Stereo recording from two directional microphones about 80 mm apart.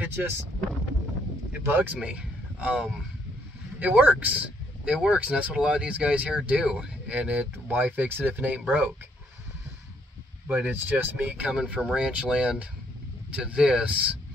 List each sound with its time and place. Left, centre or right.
0.0 s speech: right
1.6 s speech: right
2.0 s speech: centre
10.5 s speech: right